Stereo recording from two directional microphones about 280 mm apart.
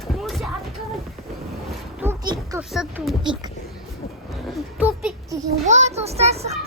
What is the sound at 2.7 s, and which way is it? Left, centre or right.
Speech, centre.